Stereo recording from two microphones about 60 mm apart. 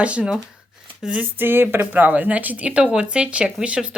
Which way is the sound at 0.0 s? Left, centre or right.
Right.